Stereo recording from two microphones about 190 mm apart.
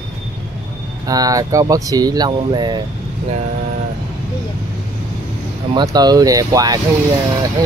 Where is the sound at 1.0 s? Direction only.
20° right (ahead or behind).